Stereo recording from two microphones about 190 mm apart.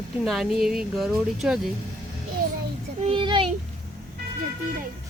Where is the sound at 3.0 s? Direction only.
30° right (ahead or behind).